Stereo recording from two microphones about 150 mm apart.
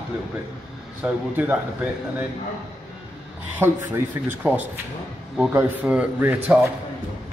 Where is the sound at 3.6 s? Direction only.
15° right (ahead or behind).